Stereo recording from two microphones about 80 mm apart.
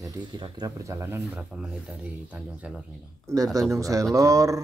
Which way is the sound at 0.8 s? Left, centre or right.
Right.